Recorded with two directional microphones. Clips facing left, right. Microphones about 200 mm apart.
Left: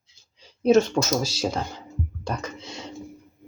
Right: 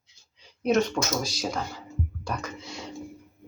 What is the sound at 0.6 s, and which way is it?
Speech, 30° left (ahead or behind).